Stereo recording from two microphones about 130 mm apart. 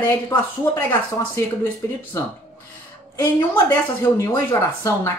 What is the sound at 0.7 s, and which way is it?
Speech, 15° left (ahead or behind).